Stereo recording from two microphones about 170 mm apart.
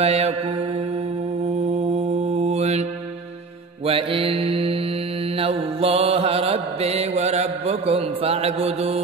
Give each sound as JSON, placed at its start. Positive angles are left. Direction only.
{"t": 0.0, "sound": "mantra", "side_deg": -35}
{"t": 2.3, "sound": "mantra", "side_deg": -40}
{"t": 3.8, "sound": "mantra", "side_deg": -35}